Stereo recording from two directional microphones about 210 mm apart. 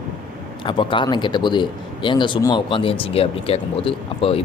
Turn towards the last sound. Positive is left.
turn(degrees=25)  # may be behind; listen again after turning